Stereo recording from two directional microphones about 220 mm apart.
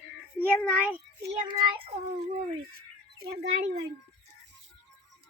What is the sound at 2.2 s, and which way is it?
Speech, 35° right (ahead or behind).